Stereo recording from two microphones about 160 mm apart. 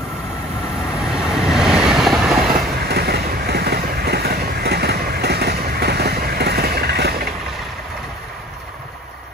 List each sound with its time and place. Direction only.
1.0 s train: 5° right (ahead or behind)
2.9 s vehicle: 90° right